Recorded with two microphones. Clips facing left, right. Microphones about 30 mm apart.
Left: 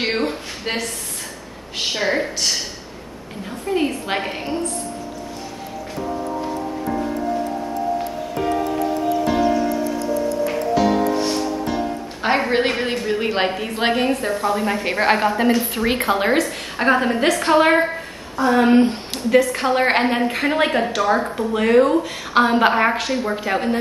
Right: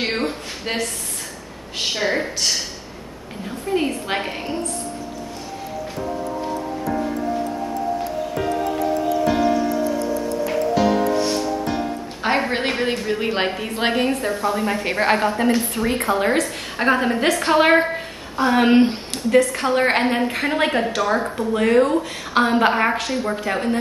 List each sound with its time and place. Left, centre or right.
0.0 s a woman's voice: centre
12.2 s a woman's voice: centre
15.9 s a woman's voice: left
16.3 s a woman's voice: centre
17.9 s a sound: right
18.6 s speech: right
19.1 s a woman's voice: centre